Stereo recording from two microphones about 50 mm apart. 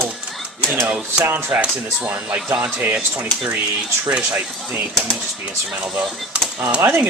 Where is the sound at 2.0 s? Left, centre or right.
Right.